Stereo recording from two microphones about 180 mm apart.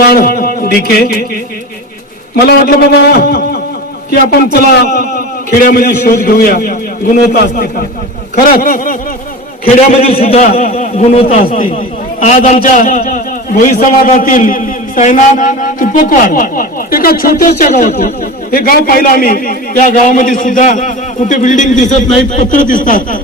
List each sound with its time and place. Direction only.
0.1 s a sound: 55° left (ahead or behind)
0.9 s a man's voice: 55° left (ahead or behind)
9.6 s a man's voice: 35° left (ahead or behind)
11.4 s a man's voice: 50° left (ahead or behind)